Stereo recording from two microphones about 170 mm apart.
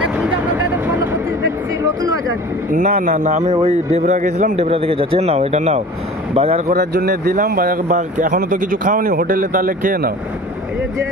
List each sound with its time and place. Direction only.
0.0 s a sound: 5° right (ahead or behind)
2.7 s speech: 50° right (ahead or behind)
4.6 s speech: 35° right (ahead or behind)
6.7 s a man's voice: 65° right (ahead or behind)